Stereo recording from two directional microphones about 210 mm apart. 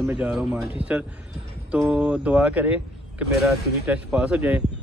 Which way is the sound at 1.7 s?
5° right (ahead or behind).